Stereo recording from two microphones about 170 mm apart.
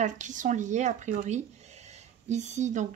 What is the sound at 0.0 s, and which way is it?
Speech, 45° right (ahead or behind).